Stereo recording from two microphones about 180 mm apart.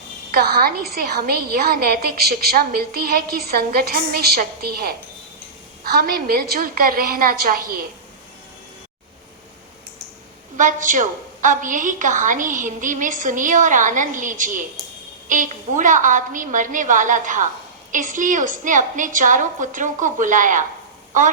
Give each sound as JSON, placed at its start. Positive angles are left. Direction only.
{"t": 0.3, "sound": "a woman's voice", "side_deg": -60}
{"t": 10.6, "sound": "a woman's voice", "side_deg": -45}